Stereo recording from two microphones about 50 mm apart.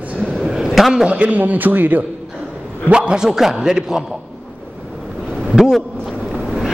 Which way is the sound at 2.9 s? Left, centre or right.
Centre.